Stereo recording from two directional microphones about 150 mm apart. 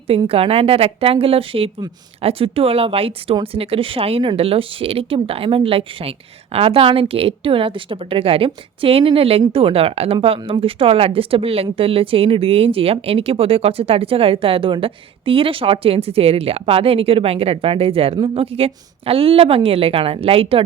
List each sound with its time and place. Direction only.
0.3 s speech: 40° right (ahead or behind)